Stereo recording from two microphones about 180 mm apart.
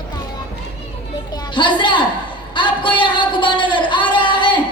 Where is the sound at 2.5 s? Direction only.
25° left (ahead or behind).